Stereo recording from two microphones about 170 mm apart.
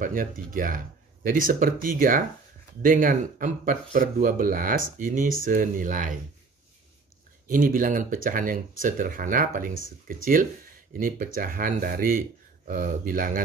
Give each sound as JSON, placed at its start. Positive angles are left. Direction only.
{"t": 0.0, "sound": "speech", "side_deg": -55}
{"t": 7.4, "sound": "speech", "side_deg": -55}